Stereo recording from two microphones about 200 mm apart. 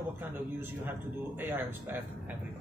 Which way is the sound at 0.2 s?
10° right (ahead or behind).